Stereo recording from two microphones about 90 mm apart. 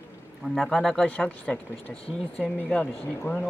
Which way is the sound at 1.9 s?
90° left.